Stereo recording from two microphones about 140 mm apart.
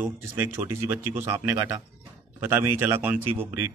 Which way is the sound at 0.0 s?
15° right (ahead or behind).